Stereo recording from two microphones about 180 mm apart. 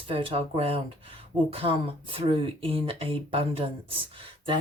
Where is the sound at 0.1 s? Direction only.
30° right (ahead or behind).